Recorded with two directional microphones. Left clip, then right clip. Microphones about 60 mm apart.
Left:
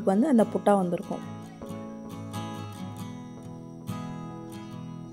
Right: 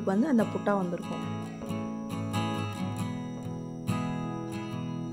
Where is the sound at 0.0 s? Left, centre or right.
Left.